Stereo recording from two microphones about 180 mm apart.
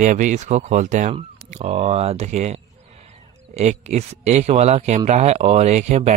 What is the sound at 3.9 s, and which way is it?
Speech, 35° right (ahead or behind).